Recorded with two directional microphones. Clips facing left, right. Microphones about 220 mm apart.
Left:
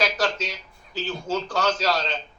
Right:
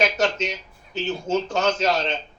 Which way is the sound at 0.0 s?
25° right (ahead or behind).